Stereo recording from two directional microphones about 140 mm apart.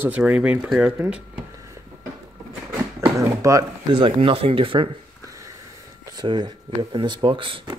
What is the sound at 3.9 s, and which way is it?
Speech, 35° right (ahead or behind).